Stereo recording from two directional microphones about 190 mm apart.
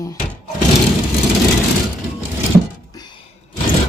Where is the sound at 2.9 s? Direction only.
20° left (ahead or behind).